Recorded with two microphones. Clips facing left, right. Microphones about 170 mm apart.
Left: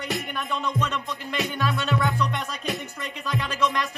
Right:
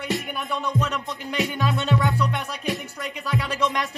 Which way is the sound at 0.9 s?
15° right (ahead or behind).